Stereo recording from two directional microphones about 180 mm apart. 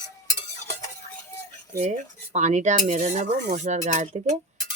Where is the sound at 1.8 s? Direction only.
40° right (ahead or behind).